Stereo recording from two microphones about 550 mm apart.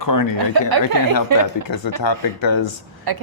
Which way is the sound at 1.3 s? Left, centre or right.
Right.